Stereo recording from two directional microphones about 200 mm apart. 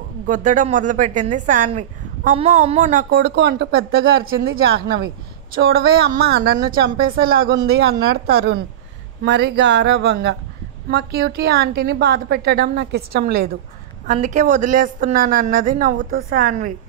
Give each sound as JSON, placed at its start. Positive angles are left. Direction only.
{"t": 0.3, "sound": "speech", "side_deg": -40}
{"t": 3.2, "sound": "speech", "side_deg": -60}
{"t": 14.0, "sound": "speech", "side_deg": -35}